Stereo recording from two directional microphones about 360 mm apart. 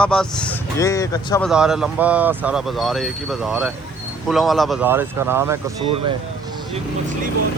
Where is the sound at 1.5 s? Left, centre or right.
Centre.